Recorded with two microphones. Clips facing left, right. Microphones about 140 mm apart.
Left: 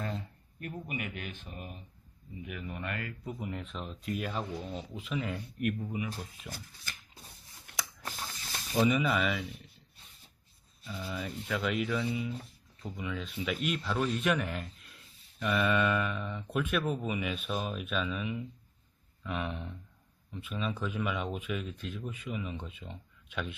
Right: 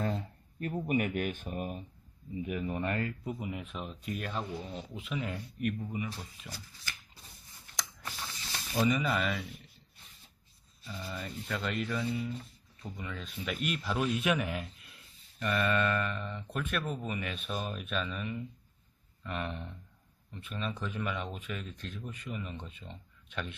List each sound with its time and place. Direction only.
0.9 s speech: 45° right (ahead or behind)
3.2 s speech: centre (ahead or behind)
6.5 s speech: 10° left (ahead or behind)
7.7 s a sound: 60° left (ahead or behind)
8.7 s speech: 5° left (ahead or behind)
10.8 s speech: centre (ahead or behind)